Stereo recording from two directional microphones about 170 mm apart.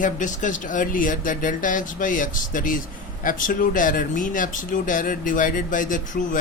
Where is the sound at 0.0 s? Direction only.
50° left (ahead or behind).